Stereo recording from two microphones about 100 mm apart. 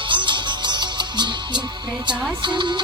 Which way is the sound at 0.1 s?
50° right (ahead or behind).